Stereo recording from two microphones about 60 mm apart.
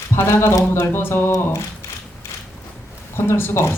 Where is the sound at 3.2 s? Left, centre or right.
Left.